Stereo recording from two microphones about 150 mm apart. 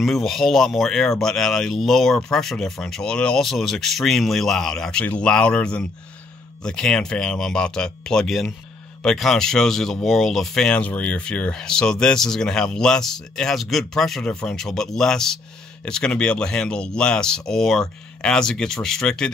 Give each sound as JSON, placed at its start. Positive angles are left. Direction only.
{"t": 0.0, "sound": "speech", "side_deg": 0}